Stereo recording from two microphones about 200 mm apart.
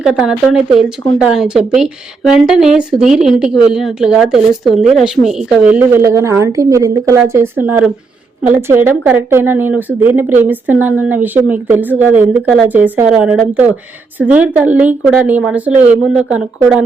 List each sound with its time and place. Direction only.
0.0 s speech: 5° right (ahead or behind)